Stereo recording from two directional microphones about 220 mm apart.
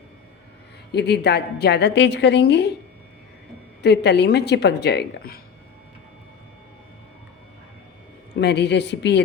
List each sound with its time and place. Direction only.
0.9 s a woman's voice: 45° left (ahead or behind)
3.8 s a woman's voice: 50° left (ahead or behind)
8.4 s a woman's voice: 50° left (ahead or behind)